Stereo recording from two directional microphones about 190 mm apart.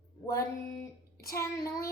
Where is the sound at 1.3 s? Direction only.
15° left (ahead or behind).